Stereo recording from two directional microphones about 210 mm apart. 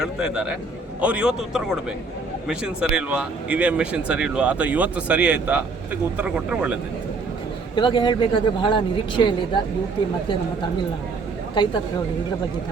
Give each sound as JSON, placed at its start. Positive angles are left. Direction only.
{"t": 0.0, "sound": "speech", "side_deg": -5}
{"t": 7.8, "sound": "speech", "side_deg": 25}
{"t": 11.5, "sound": "speech", "side_deg": 20}